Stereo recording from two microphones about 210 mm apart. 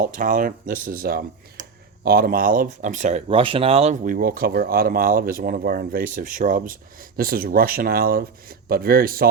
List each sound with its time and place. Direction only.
0.0 s speech: 40° right (ahead or behind)